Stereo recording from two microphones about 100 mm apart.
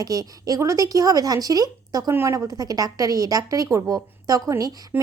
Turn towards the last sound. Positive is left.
turn(degrees=-35)  # may be behind; listen again after turning